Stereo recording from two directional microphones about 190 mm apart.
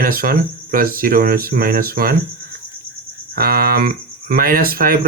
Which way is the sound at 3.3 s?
50° right (ahead or behind).